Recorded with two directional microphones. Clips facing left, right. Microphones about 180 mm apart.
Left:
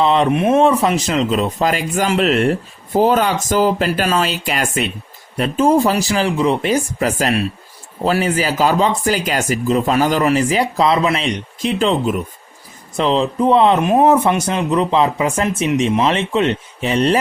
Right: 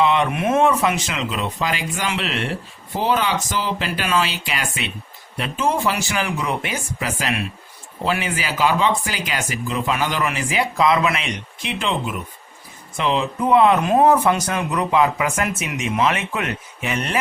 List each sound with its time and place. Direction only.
0.0 s speech: 30° left (ahead or behind)